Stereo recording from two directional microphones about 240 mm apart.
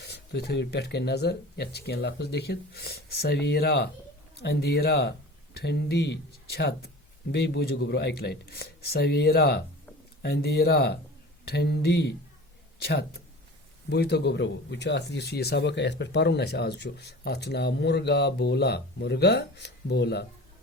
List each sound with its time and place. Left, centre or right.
0.0 s speech: left